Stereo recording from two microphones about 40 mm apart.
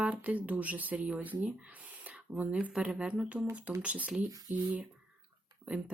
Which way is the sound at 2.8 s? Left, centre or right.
Right.